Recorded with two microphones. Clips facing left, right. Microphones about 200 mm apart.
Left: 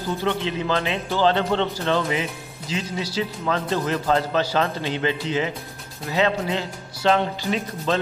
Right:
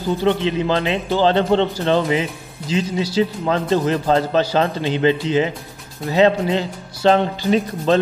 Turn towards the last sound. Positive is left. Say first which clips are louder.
# right 7 dB
turn(degrees=-35)  # may be behind; listen again after turning